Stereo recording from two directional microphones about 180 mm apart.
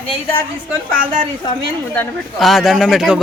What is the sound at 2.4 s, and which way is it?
Speech, centre (ahead or behind).